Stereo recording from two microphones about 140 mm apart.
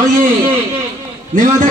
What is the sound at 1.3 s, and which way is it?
Speech, 70° right (ahead or behind).